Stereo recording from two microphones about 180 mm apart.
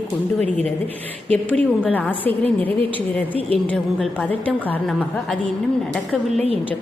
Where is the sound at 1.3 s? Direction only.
10° left (ahead or behind).